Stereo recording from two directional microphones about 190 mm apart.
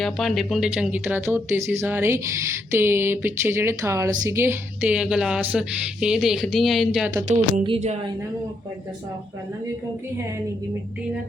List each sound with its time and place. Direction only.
0.0 s speech: centre (ahead or behind)
7.3 s speech: 40° right (ahead or behind)
7.6 s speech: 30° right (ahead or behind)